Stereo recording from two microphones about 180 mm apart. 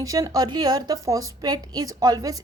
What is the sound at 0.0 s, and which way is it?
A woman's voice, 20° right (ahead or behind).